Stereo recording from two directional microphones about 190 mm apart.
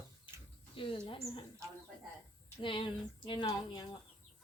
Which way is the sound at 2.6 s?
25° left (ahead or behind).